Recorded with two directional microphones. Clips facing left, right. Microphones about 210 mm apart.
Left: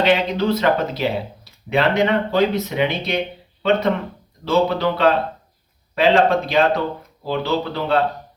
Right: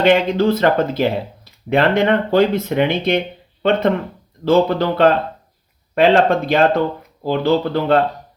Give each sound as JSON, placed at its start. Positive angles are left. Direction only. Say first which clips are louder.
{"t": 0.0, "sound": "speech", "louder": "right 4 dB", "side_deg": -50}